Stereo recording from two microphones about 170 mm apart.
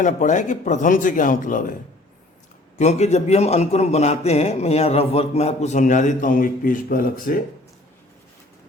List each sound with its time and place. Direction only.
0.0 s a man's voice: 50° left (ahead or behind)
2.7 s a man's voice: 40° left (ahead or behind)